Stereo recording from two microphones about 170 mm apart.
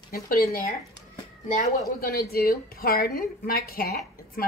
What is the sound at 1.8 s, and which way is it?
A woman's voice, 60° left (ahead or behind).